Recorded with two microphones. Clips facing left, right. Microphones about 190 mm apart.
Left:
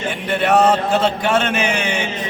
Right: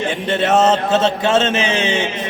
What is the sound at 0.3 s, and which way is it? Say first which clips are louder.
A man's voice: even; 25° right (ahead or behind).